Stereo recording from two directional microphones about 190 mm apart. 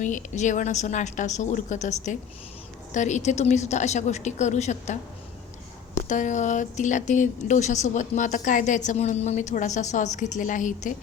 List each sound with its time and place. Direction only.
0.0 s speech: 40° left (ahead or behind)
6.1 s speech: 40° left (ahead or behind)